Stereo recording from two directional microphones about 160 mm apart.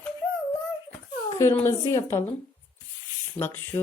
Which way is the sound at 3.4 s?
15° left (ahead or behind).